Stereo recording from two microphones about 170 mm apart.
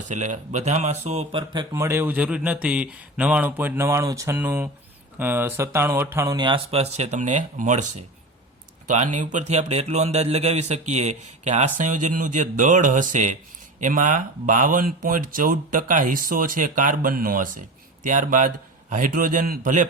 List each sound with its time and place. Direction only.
0.1 s speech: 45° right (ahead or behind); by 1.6 s 30° right (ahead or behind)
1.7 s speech: 15° right (ahead or behind); by 7.9 s 45° right (ahead or behind)
8.9 s speech: 45° right (ahead or behind)